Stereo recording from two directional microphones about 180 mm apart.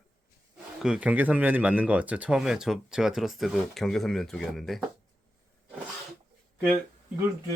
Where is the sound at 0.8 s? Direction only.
5° right (ahead or behind).